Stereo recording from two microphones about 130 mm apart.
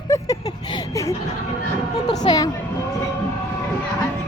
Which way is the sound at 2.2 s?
30° left (ahead or behind).